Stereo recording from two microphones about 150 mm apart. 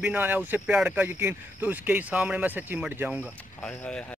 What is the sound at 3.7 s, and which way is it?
Speech, 10° left (ahead or behind).